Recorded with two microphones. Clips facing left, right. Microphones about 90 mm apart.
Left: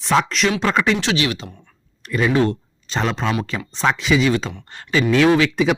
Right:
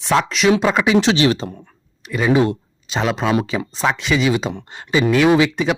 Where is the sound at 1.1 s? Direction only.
30° right (ahead or behind).